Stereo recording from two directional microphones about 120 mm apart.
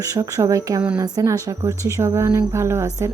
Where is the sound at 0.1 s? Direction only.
30° right (ahead or behind).